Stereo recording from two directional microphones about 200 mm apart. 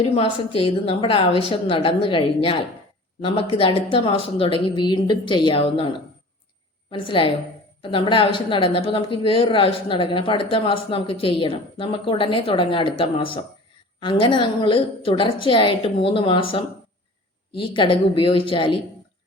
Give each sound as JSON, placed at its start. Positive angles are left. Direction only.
{"t": 0.0, "sound": "a woman's voice", "side_deg": 30}
{"t": 6.9, "sound": "a woman's voice", "side_deg": 25}